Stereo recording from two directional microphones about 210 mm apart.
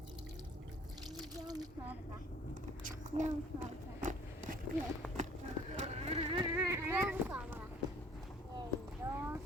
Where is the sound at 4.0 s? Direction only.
40° right (ahead or behind).